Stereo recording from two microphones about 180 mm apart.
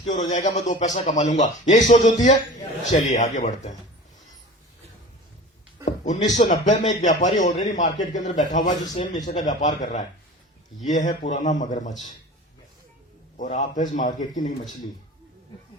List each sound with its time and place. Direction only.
0.0 s a man's voice: 45° left (ahead or behind)
5.8 s a man's voice: 45° left (ahead or behind)
13.3 s a man's voice: 45° left (ahead or behind)